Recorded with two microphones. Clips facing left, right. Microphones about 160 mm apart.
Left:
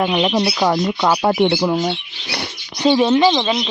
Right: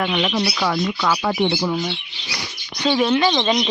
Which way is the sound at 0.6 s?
40° left (ahead or behind).